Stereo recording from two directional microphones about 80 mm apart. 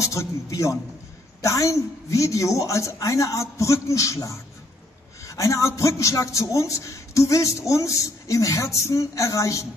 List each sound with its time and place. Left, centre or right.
0.0 s a man's voice: left